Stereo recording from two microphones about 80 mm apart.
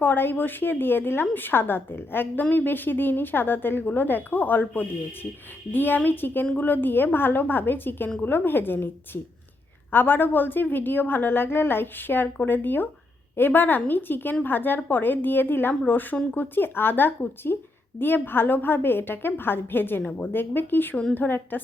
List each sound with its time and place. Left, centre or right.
0.0 s a woman's voice: left